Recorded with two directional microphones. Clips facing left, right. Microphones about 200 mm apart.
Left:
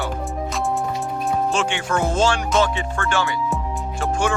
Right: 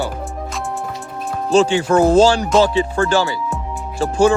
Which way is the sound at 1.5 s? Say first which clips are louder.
Right 9 dB; 35° right (ahead or behind).